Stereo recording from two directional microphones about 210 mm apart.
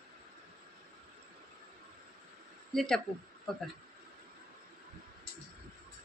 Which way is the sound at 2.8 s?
Centre (ahead or behind).